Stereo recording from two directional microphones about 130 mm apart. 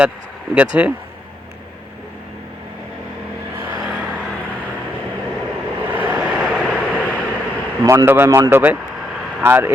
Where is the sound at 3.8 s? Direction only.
10° right (ahead or behind).